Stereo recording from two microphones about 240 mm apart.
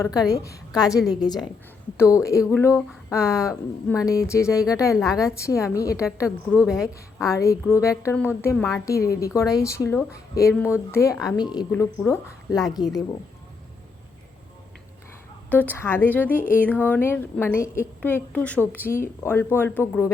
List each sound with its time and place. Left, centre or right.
0.3 s speech: centre
6.7 s a woman's voice: centre
7.2 s speech: centre
9.2 s speech: centre
15.4 s speech: centre